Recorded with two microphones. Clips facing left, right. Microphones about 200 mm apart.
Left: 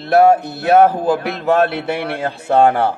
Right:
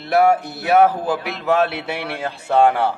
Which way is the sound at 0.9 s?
55° left (ahead or behind).